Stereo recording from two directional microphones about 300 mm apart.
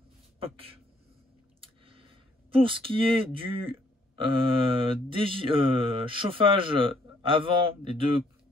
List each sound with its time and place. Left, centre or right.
0.4 s a man's voice: centre
1.6 s a sound: centre
4.2 s mantra: centre